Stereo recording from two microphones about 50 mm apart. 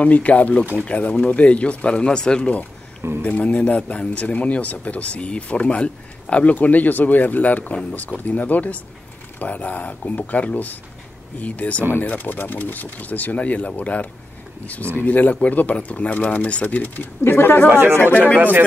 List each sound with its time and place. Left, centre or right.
0.0 s speech: left
3.0 s a sound: right
3.3 s speech: left
15.0 s speech: left
16.6 s speech: left
17.2 s speech: left
17.6 s speech: right